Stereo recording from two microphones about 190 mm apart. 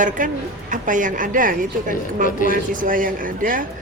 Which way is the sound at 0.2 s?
45° right (ahead or behind).